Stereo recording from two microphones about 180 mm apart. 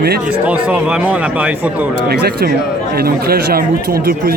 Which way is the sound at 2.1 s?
60° right (ahead or behind).